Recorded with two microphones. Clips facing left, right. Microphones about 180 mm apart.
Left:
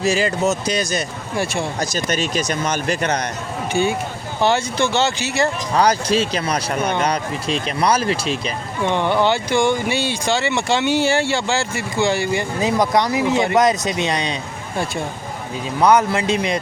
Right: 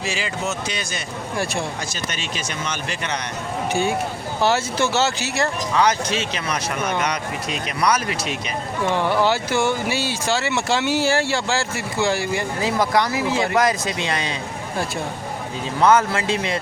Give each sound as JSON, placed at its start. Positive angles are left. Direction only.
{"t": 0.0, "sound": "speech", "side_deg": 40}
{"t": 3.7, "sound": "speech", "side_deg": 0}
{"t": 5.7, "sound": "speech", "side_deg": 35}
{"t": 8.8, "sound": "speech", "side_deg": -5}
{"t": 12.5, "sound": "speech", "side_deg": 20}
{"t": 15.8, "sound": "speech", "side_deg": 15}